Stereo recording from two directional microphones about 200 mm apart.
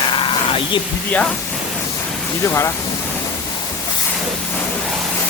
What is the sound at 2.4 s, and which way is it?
Speech, 15° left (ahead or behind).